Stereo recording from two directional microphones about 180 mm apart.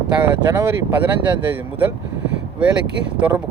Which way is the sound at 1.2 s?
10° right (ahead or behind).